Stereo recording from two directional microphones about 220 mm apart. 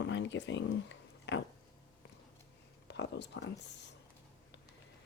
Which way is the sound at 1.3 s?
50° left (ahead or behind).